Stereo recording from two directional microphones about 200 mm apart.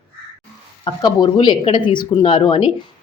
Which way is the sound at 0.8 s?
20° left (ahead or behind).